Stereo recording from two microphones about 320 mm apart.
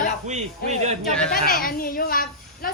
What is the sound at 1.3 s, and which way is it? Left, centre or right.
Speech, left.